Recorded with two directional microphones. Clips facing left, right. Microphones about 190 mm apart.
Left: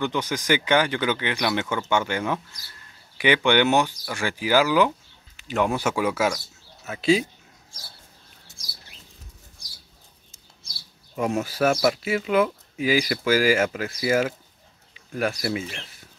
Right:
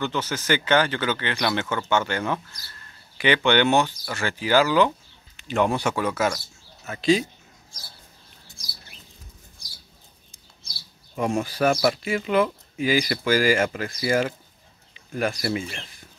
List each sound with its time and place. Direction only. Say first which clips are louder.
0.0 s speech: left 1 dB; 15° left (ahead or behind)
11.1 s speech: even; 5° left (ahead or behind)